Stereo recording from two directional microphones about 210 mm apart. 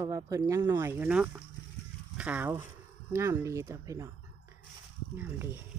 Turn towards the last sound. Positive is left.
turn(degrees=-10)  # may be behind; listen again after turning